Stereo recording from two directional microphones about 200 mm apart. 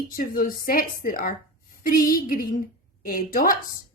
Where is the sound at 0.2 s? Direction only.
45° left (ahead or behind).